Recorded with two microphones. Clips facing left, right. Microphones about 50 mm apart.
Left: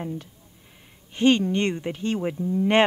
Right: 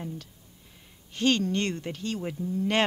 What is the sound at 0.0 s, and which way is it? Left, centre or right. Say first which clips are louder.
Speech: left 6 dB; left.